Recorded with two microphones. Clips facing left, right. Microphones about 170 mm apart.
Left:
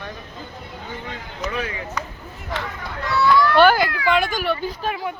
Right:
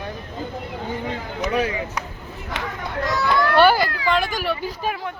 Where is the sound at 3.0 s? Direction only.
45° right (ahead or behind).